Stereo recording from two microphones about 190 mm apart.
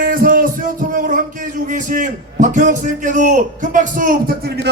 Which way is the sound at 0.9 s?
45° right (ahead or behind).